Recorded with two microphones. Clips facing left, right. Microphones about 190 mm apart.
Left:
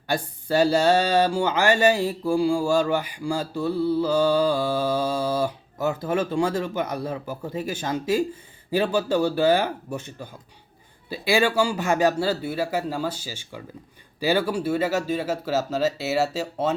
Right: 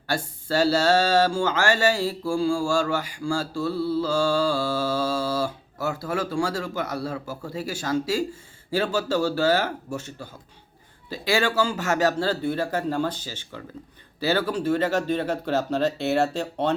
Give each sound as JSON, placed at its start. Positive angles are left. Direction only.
{"t": 0.1, "sound": "speech", "side_deg": 15}